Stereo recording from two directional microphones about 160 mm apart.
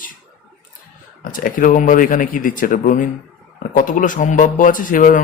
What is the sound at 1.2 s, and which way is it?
Speech, 60° left (ahead or behind).